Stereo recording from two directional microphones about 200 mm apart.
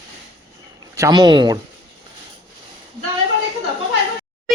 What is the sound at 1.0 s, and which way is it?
Speech, 20° right (ahead or behind).